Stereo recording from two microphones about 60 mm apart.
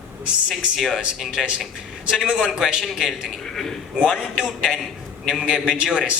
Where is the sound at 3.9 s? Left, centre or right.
Centre.